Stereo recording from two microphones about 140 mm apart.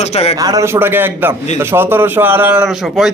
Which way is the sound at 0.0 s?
50° left (ahead or behind).